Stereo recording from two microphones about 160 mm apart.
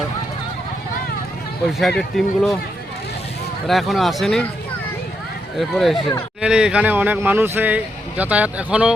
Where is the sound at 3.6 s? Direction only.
Centre (ahead or behind).